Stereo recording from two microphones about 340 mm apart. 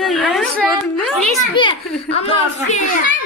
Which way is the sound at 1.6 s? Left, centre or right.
Centre.